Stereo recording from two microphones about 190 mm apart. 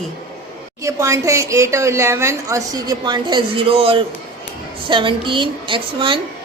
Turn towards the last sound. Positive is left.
turn(degrees=-25)  # may be behind; listen again after turning